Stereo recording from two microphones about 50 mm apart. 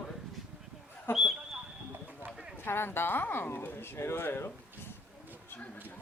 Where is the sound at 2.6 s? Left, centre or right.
Left.